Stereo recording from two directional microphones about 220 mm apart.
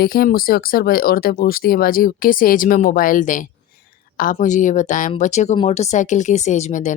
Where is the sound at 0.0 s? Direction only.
45° left (ahead or behind).